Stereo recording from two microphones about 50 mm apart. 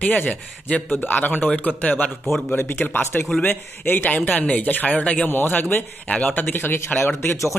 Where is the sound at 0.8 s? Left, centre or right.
Left.